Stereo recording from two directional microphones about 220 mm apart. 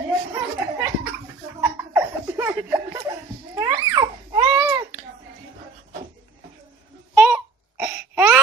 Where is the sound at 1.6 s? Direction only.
10° right (ahead or behind).